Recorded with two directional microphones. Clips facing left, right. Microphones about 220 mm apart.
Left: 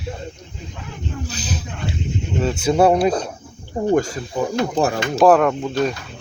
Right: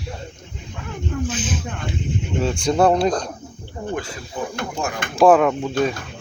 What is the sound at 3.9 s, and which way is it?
Speech, 45° left (ahead or behind).